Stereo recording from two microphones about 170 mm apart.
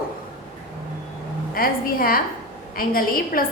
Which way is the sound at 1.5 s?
60° left (ahead or behind).